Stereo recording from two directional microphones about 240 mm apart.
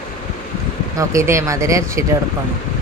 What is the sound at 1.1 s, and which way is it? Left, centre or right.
Speech, centre.